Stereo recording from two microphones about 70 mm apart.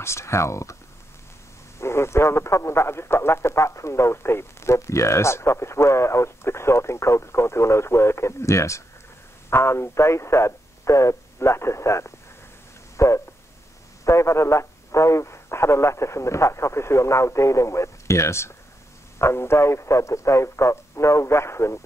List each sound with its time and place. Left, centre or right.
0.0 s speech: left
1.8 s speech: left
12.9 s a sound: left
14.0 s speech: left